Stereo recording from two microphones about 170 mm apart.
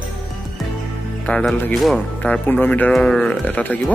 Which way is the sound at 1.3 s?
5° left (ahead or behind).